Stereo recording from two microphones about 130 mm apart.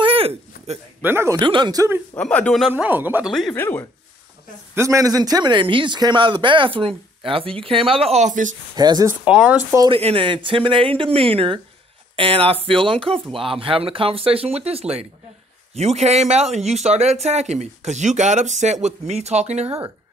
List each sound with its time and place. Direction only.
0.0 s a sound: 45° right (ahead or behind)
1.0 s speech: 20° right (ahead or behind)
1.4 s a man's voice: 35° right (ahead or behind)
2.1 s speech: 10° left (ahead or behind)
2.7 s speech: 15° right (ahead or behind)
3.5 s speech: 15° left (ahead or behind)
4.7 s a man's voice: 25° right (ahead or behind); by 8.5 s 75° right (ahead or behind)
8.7 s a man's voice: 30° right (ahead or behind)
9.2 s speech: 10° right (ahead or behind)
9.8 s a man's voice: 45° right (ahead or behind)